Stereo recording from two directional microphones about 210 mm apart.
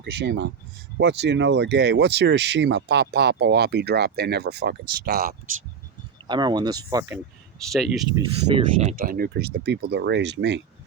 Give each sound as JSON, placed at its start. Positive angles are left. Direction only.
{"t": 0.0, "sound": "speech", "side_deg": -55}
{"t": 6.2, "sound": "speech", "side_deg": -20}
{"t": 7.6, "sound": "speech", "side_deg": 0}
{"t": 8.8, "sound": "speech", "side_deg": -40}